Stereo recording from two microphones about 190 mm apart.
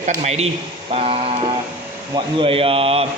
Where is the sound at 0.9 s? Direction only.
30° right (ahead or behind).